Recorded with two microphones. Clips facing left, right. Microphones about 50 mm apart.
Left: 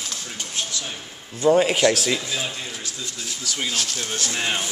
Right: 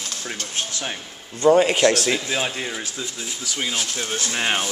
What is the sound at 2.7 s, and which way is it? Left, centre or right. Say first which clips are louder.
Speech: right 3 dB; centre.